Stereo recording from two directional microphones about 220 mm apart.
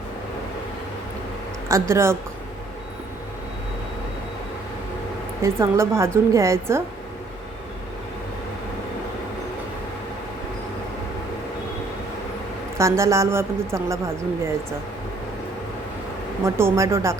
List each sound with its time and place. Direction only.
1.6 s speech: 15° right (ahead or behind)
5.4 s a woman's voice: 10° right (ahead or behind)
12.7 s a woman's voice: 15° right (ahead or behind)
16.4 s a woman's voice: 10° right (ahead or behind)